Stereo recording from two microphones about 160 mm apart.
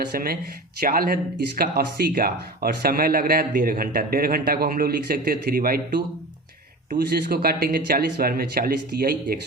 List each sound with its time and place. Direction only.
0.1 s speech: 70° right (ahead or behind)
7.1 s speech: 75° right (ahead or behind)